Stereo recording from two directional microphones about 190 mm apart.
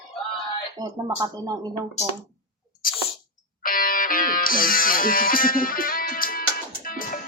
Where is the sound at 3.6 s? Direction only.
50° left (ahead or behind).